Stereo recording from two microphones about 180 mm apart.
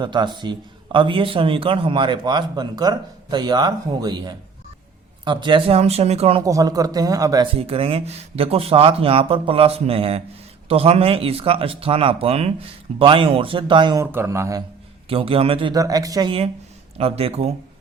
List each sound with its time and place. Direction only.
0.0 s a man's voice: 25° right (ahead or behind)
6.4 s a man's voice: 20° right (ahead or behind)
7.5 s a man's voice: 35° right (ahead or behind)
14.0 s speech: 15° right (ahead or behind)
15.1 s a man's voice: 30° right (ahead or behind)
17.0 s speech: 35° right (ahead or behind)